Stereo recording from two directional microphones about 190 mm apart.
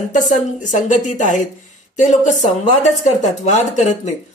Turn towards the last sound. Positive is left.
turn(degrees=40)  # may be behind; listen again after turning